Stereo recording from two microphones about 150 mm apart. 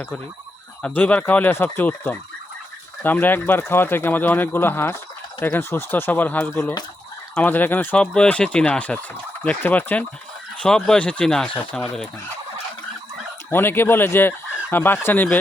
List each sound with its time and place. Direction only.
0.8 s speech: 10° left (ahead or behind)
13.5 s chicken: 15° left (ahead or behind)
15.0 s speech: 10° left (ahead or behind)